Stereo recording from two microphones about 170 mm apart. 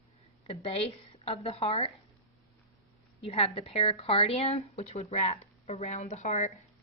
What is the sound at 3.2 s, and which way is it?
Speech, 35° left (ahead or behind).